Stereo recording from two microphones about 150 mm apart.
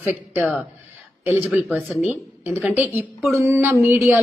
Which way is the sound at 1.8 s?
Centre (ahead or behind).